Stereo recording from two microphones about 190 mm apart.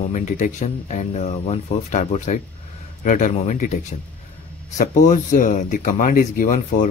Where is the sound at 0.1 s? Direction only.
40° left (ahead or behind).